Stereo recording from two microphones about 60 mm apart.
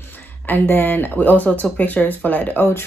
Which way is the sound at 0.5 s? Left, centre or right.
Left.